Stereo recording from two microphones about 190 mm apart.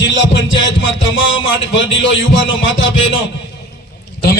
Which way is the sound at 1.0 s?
90° left.